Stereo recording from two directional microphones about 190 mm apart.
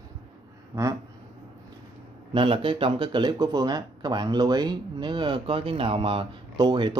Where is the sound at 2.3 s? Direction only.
25° right (ahead or behind).